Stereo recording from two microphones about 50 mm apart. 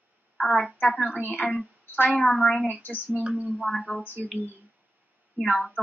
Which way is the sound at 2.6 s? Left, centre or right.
Left.